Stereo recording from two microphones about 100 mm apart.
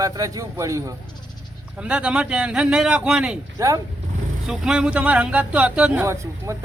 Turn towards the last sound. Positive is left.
turn(degrees=-30)  # may be behind; listen again after turning